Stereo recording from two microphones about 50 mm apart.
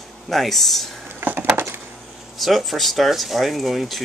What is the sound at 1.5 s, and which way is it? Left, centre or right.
Wood, right.